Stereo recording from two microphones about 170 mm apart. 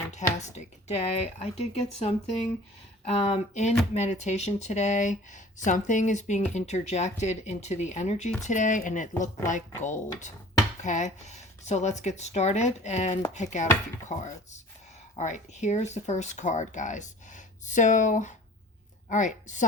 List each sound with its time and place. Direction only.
0.1 s speech: 40° left (ahead or behind)
15.1 s a woman's voice: 45° left (ahead or behind)